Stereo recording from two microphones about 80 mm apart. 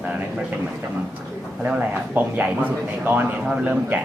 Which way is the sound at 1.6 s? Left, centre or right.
Centre.